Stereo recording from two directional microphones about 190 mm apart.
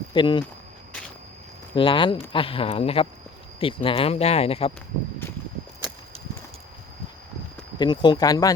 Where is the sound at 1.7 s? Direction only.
25° left (ahead or behind).